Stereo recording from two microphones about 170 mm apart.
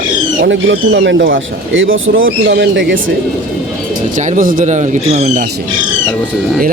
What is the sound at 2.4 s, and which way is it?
Speech, 90° right.